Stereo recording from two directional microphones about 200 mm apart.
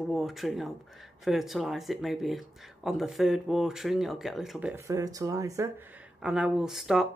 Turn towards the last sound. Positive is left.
turn(degrees=0)  # may be behind; listen again after turning